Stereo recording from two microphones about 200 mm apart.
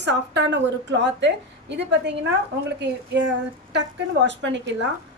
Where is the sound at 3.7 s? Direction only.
60° right (ahead or behind).